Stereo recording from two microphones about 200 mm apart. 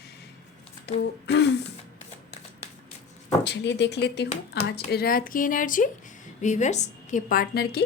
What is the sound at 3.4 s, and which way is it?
A woman's voice, 60° left (ahead or behind).